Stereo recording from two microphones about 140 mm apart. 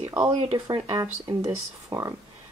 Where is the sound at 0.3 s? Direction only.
50° right (ahead or behind).